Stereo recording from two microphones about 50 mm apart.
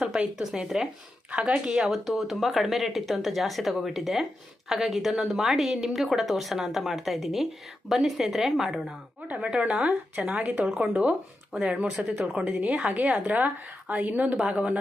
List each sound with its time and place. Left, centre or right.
0.0 s speech: centre
1.3 s a woman's voice: right
1.8 s a woman's voice: centre
9.2 s a woman's voice: right
11.6 s a woman's voice: right
14.4 s a woman's voice: right